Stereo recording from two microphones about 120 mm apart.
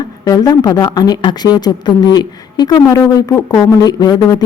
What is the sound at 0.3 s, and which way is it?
A woman's voice, 30° left (ahead or behind).